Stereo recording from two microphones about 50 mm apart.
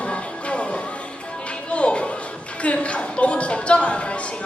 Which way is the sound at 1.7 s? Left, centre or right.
Left.